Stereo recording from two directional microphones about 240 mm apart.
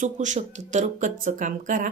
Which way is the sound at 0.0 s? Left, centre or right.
Right.